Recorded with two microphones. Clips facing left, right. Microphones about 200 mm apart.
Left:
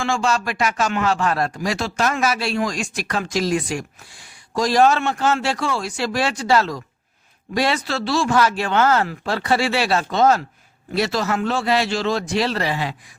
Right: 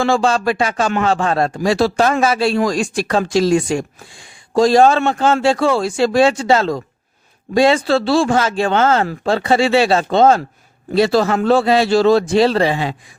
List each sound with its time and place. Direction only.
0.0 s speech: 35° right (ahead or behind)